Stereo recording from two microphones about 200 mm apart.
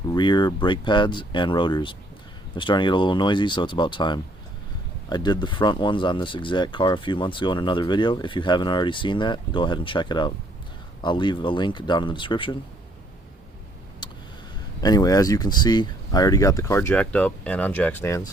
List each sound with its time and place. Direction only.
0.1 s speech: 20° left (ahead or behind)
14.0 s a sound: 25° left (ahead or behind)
14.8 s speech: 20° left (ahead or behind)